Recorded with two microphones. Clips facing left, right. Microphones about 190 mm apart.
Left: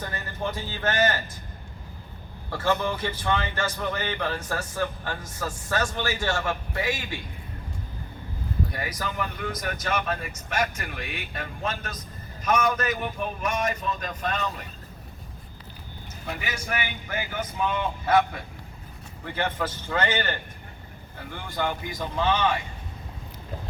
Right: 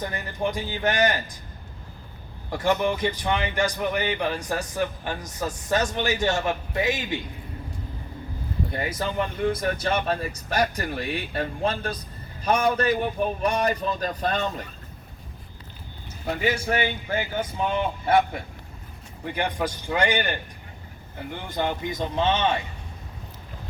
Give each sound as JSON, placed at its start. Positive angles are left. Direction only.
{"t": 0.0, "sound": "a man's voice", "side_deg": -15}
{"t": 2.5, "sound": "a man's voice", "side_deg": -15}
{"t": 8.7, "sound": "speech", "side_deg": -25}
{"t": 16.2, "sound": "a man's voice", "side_deg": -30}